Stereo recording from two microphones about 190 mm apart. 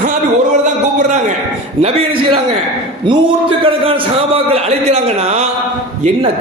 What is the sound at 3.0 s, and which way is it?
A man's voice, 25° right (ahead or behind).